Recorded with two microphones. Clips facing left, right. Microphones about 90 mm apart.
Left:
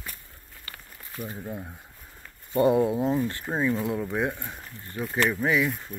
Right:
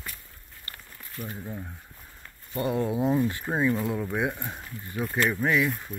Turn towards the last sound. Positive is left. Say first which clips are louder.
# even
turn(degrees=0)  # may be behind; listen again after turning